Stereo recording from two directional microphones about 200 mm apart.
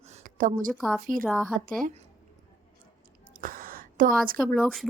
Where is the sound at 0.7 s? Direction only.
Centre (ahead or behind).